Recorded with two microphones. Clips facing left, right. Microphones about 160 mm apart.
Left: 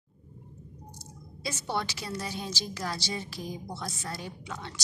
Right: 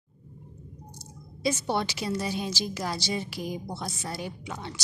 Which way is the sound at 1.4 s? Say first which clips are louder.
Right 6 dB; 15° right (ahead or behind).